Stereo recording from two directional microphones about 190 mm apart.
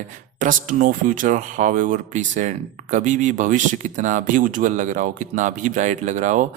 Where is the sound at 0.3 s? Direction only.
45° right (ahead or behind).